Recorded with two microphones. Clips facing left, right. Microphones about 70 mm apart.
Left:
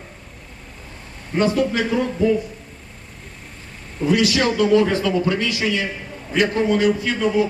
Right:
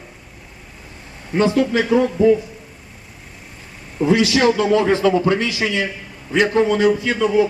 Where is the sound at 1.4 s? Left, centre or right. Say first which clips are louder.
Right 2 dB; right.